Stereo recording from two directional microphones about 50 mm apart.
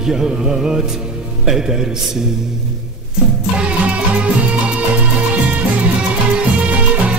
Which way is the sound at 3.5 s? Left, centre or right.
Right.